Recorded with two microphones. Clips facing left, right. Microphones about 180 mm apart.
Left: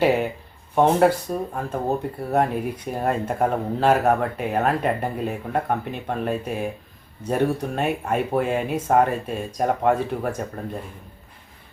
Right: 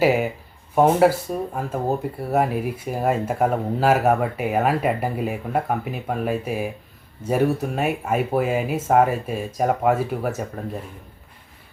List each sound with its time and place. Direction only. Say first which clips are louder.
0.0 s speech: right 1 dB; 5° right (ahead or behind)